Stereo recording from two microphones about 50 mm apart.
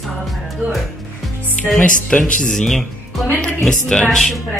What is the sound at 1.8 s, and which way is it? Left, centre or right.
Speech, left.